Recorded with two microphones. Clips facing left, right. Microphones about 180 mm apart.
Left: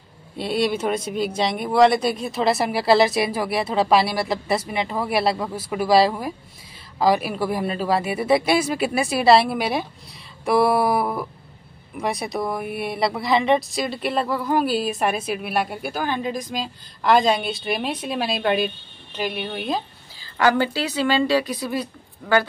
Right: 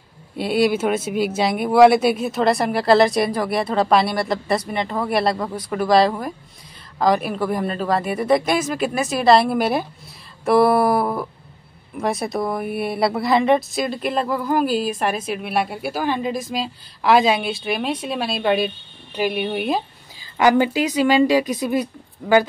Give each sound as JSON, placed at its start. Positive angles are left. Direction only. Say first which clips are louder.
{"t": 0.4, "sound": "a woman's voice", "louder": "right 4 dB", "side_deg": -5}